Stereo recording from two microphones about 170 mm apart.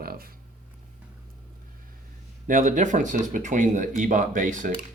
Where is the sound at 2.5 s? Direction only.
50° right (ahead or behind).